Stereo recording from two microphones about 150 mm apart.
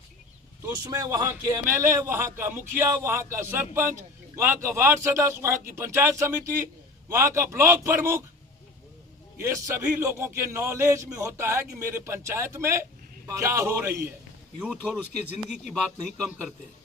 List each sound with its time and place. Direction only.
0.6 s a man's voice: 25° right (ahead or behind)
9.4 s a man's voice: 20° right (ahead or behind)
14.8 s a man's voice: 5° right (ahead or behind)